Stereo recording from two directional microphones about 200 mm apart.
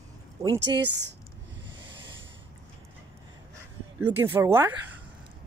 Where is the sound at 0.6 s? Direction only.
60° right (ahead or behind).